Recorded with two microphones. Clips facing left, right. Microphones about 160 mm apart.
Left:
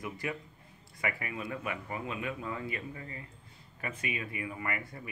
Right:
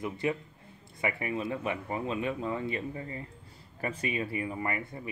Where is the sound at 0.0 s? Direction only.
25° right (ahead or behind).